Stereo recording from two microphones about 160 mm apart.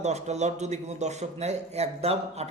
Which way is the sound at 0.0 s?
45° right (ahead or behind).